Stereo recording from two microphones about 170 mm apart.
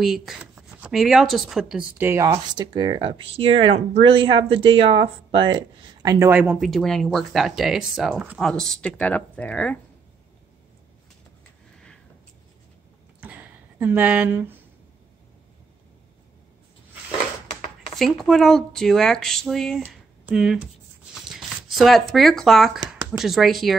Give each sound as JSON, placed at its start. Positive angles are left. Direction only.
{"t": 0.0, "sound": "speech", "side_deg": 0}
{"t": 6.0, "sound": "speech", "side_deg": -15}
{"t": 6.4, "sound": "speech", "side_deg": 0}
{"t": 13.2, "sound": "a sound", "side_deg": -10}
{"t": 17.9, "sound": "speech", "side_deg": 0}
{"t": 19.9, "sound": "a sound", "side_deg": -5}
{"t": 21.3, "sound": "speech", "side_deg": 0}